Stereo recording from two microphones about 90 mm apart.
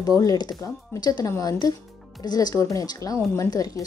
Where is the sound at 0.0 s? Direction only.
40° left (ahead or behind).